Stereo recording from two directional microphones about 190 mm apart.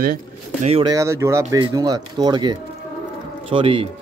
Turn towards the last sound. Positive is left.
turn(degrees=-25)  # may be behind; listen again after turning